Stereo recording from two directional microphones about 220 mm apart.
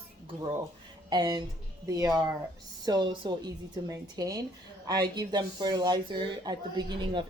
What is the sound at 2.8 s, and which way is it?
A woman's voice, 20° right (ahead or behind).